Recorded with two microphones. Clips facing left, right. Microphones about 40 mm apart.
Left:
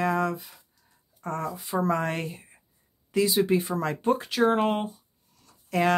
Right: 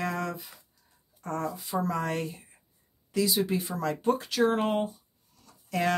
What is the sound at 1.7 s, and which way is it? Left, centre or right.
Speech, left.